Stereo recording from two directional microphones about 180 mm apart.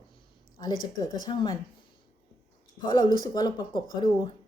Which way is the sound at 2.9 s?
25° left (ahead or behind).